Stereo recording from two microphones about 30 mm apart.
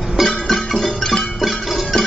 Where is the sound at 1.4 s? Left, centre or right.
Centre.